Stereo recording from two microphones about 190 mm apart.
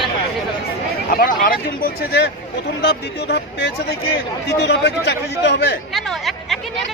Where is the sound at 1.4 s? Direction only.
50° left (ahead or behind); by 5.8 s 65° left (ahead or behind).